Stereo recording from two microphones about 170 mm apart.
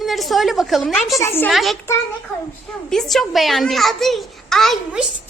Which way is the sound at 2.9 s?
Centre (ahead or behind).